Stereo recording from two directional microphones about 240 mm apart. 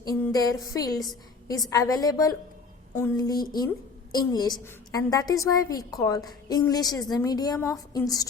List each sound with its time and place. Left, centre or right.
0.1 s a woman's voice: centre